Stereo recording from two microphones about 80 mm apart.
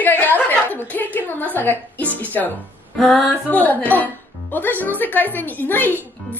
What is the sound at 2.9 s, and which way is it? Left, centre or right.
Speech, centre.